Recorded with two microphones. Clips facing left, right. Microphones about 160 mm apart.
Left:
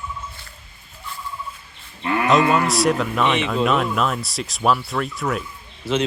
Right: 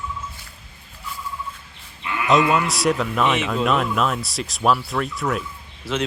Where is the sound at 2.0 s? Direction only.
40° left (ahead or behind).